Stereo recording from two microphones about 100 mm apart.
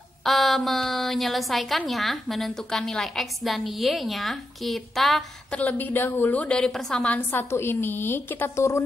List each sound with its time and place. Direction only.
0.2 s a woman's voice: centre (ahead or behind)
5.6 s a woman's voice: 15° left (ahead or behind)